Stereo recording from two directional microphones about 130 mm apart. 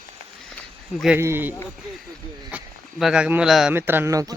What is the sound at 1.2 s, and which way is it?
Speech, 20° right (ahead or behind).